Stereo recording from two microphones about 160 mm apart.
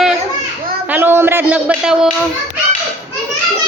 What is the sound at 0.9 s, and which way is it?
A woman's voice, 15° right (ahead or behind).